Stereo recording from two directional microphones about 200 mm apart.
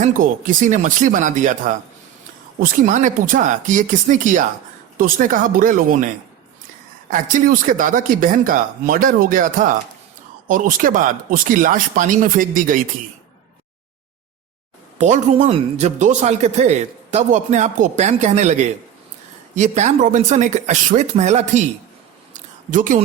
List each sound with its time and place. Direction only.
0.0 s speech: 40° right (ahead or behind)
7.1 s speech: 45° right (ahead or behind)
14.9 s speech: 35° right (ahead or behind)
22.3 s a sound: 40° right (ahead or behind)